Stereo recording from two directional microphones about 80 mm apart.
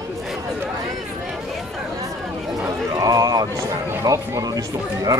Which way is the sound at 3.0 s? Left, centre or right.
Right.